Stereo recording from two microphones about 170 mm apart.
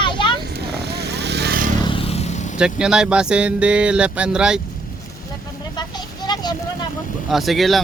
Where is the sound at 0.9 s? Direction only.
75° right (ahead or behind).